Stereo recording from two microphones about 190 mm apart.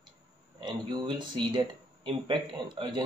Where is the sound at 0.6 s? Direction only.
25° right (ahead or behind).